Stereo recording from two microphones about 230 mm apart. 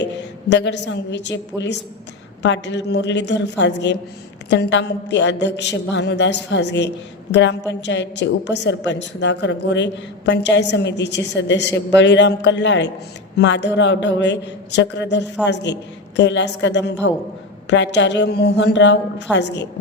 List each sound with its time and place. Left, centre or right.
0.5 s a woman's voice: left